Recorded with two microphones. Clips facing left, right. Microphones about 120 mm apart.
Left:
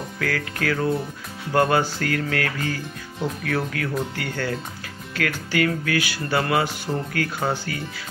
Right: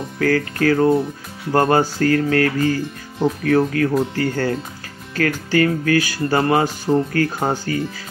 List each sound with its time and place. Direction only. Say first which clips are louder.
0.2 s speech: right 9 dB; 40° right (ahead or behind)